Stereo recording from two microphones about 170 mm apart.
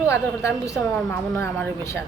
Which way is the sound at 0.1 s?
15° left (ahead or behind).